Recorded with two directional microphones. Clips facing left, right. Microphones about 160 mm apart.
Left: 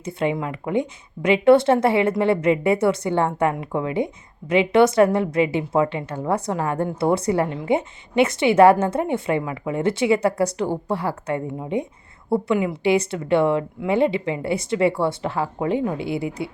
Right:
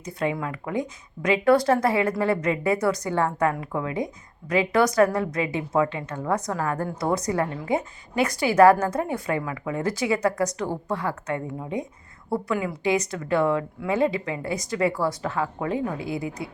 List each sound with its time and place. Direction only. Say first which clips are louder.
0.0 s speech: left 3 dB; 25° left (ahead or behind)